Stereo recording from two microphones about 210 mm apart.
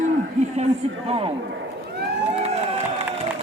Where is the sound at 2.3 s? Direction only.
30° right (ahead or behind).